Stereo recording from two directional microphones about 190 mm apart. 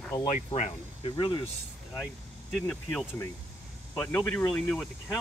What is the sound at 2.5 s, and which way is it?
Speech, 5° left (ahead or behind).